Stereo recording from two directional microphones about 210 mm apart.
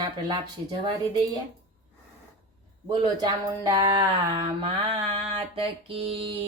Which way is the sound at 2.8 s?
20° right (ahead or behind).